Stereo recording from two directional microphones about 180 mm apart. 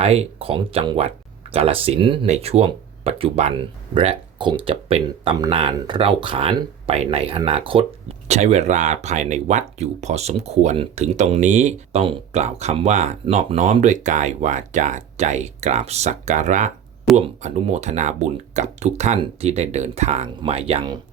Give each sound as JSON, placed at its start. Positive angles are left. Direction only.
{"t": 0.0, "sound": "speech", "side_deg": -35}